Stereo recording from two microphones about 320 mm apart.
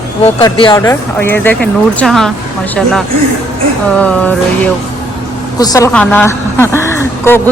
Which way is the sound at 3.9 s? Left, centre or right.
Centre.